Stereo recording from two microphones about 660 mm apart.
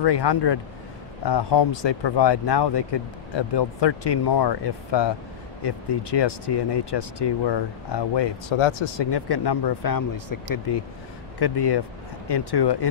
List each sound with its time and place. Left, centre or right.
0.0 s speech: left